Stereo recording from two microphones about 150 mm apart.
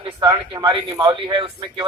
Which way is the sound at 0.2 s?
30° right (ahead or behind).